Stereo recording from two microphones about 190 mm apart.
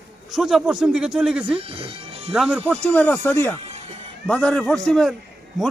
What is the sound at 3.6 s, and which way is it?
Music, 35° right (ahead or behind).